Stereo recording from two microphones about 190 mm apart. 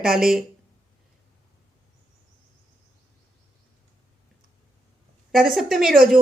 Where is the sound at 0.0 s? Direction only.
Centre (ahead or behind).